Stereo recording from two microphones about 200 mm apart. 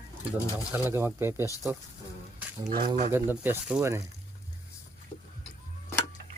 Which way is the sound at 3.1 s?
10° right (ahead or behind).